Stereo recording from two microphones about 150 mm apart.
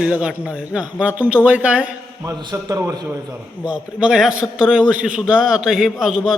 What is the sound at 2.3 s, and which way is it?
Speech, 25° right (ahead or behind).